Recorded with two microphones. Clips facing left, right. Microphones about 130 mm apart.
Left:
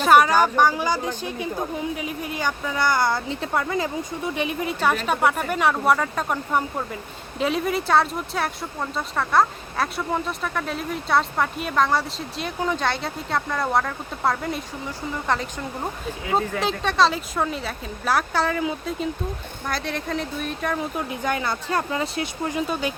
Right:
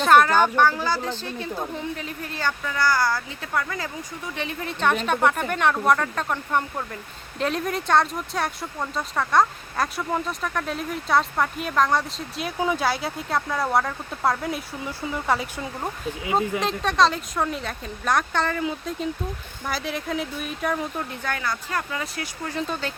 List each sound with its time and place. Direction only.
0.0 s speech: 10° left (ahead or behind)
20.9 s speech: 15° left (ahead or behind)
22.5 s speech: 10° left (ahead or behind)